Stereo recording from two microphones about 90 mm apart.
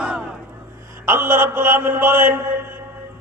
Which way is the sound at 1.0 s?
20° right (ahead or behind).